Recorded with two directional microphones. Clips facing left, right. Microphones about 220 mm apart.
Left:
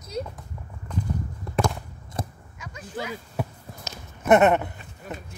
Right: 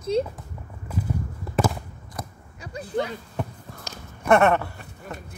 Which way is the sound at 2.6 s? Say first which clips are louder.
Right 7 dB; 35° right (ahead or behind).